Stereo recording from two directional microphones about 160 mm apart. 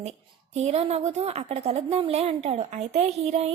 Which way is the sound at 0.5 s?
40° right (ahead or behind).